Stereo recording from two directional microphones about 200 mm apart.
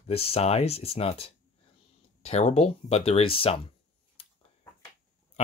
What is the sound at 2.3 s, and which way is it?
Speech, 35° left (ahead or behind).